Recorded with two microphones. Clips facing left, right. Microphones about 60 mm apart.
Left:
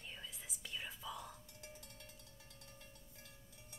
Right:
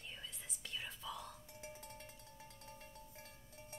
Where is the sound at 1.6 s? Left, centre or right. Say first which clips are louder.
Right 4 dB; right.